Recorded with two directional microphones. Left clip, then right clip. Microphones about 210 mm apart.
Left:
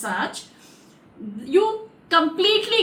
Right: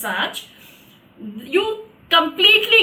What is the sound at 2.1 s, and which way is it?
Speech, 15° left (ahead or behind).